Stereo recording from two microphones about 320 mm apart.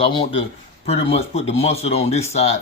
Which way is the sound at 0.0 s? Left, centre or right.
Centre.